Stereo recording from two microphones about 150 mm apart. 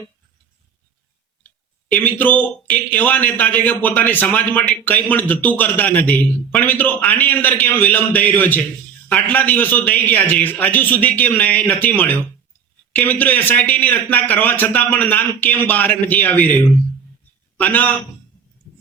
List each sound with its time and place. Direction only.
1.5 s speech: 10° left (ahead or behind)
17.6 s speech: 10° left (ahead or behind)